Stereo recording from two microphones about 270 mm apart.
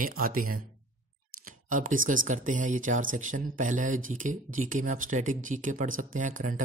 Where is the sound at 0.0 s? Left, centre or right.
Right.